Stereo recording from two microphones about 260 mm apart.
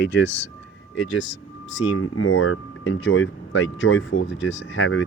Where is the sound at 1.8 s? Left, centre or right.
Left.